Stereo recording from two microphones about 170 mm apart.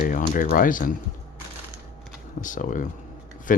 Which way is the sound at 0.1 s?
55° left (ahead or behind).